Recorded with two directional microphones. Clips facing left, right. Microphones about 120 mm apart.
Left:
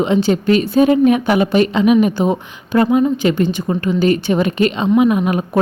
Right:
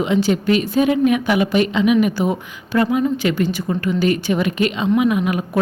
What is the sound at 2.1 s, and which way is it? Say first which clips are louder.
A woman's voice: left 3 dB; 25° left (ahead or behind).